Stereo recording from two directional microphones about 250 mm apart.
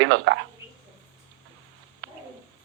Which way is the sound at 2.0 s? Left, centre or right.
Right.